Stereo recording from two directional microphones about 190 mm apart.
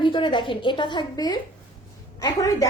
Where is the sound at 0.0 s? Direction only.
25° left (ahead or behind).